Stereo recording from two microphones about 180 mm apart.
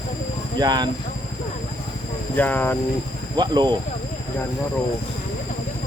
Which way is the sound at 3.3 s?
25° right (ahead or behind).